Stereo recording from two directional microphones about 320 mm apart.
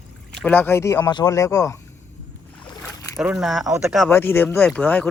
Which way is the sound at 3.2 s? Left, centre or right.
Centre.